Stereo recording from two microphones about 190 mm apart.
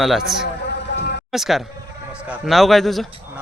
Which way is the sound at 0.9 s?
65° left (ahead or behind).